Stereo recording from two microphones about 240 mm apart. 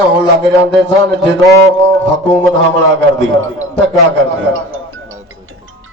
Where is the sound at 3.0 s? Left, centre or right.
Right.